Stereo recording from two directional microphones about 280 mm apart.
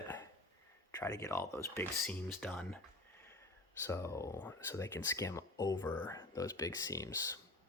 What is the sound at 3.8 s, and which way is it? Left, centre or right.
Speech, centre.